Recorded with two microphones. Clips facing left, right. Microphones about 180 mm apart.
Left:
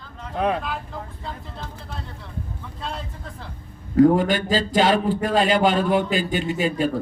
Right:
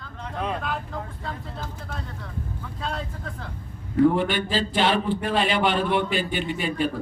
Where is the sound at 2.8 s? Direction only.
Centre (ahead or behind).